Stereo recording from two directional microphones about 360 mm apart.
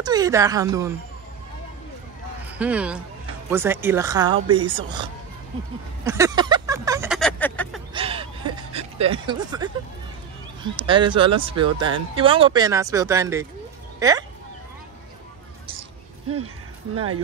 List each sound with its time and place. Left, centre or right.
0.0 s speech: centre
2.6 s speech: centre
6.0 s a sound: centre
7.9 s a sound: centre
10.6 s speech: centre
16.9 s speech: right